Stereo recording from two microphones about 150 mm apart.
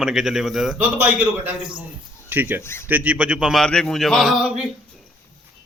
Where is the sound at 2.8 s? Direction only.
10° right (ahead or behind).